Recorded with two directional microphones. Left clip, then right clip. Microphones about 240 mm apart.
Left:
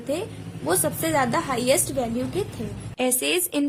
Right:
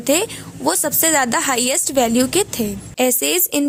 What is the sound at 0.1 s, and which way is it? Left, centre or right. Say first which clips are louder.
Speech: right 10 dB; right.